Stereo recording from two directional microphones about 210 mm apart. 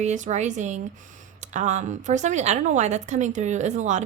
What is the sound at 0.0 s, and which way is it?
A woman's voice, 35° right (ahead or behind).